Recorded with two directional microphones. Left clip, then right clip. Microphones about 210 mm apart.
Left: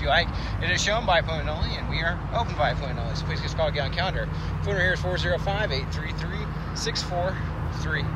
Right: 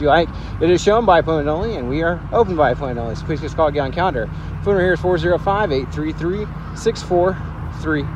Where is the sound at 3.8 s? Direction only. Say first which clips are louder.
Right 9 dB; 15° right (ahead or behind).